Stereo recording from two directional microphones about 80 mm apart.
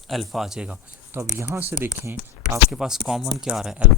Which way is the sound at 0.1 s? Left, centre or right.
Centre.